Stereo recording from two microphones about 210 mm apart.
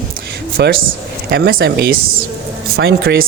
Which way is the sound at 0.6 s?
50° right (ahead or behind).